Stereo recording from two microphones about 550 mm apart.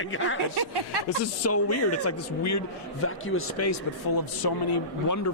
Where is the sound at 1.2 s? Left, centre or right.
Left.